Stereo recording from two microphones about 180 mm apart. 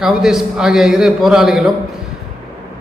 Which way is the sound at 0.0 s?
5° right (ahead or behind).